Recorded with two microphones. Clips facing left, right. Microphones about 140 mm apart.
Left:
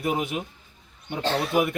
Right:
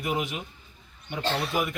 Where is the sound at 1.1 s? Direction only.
55° left (ahead or behind).